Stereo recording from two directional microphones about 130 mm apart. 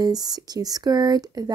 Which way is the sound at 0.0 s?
30° right (ahead or behind).